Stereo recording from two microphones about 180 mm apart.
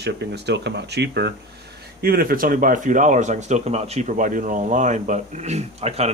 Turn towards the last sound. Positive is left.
turn(degrees=-35)  # may be behind; listen again after turning